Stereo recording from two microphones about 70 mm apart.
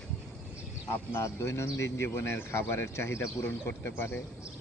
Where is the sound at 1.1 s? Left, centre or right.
Left.